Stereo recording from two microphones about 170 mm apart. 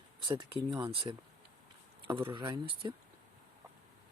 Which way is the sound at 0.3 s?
30° right (ahead or behind).